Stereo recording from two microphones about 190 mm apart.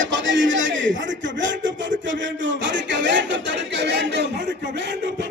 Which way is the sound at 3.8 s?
65° right (ahead or behind).